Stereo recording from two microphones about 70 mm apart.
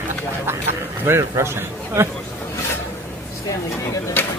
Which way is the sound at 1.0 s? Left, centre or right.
Right.